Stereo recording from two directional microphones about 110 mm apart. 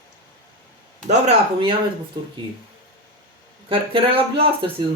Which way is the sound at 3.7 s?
55° right (ahead or behind).